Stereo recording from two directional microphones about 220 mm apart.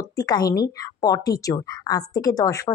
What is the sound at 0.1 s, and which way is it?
A woman's voice, 15° left (ahead or behind).